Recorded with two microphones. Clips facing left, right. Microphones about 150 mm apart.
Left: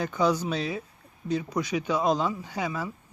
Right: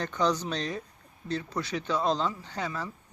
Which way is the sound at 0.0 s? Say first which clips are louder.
Left 3 dB; 10° left (ahead or behind).